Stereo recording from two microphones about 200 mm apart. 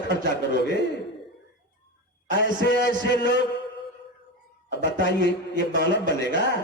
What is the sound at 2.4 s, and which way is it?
A man's voice, 55° left (ahead or behind).